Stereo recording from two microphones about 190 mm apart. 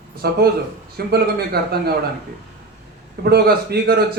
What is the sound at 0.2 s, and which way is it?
A man's voice, 55° right (ahead or behind).